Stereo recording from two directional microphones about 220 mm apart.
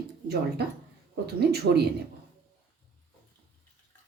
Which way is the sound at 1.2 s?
45° right (ahead or behind).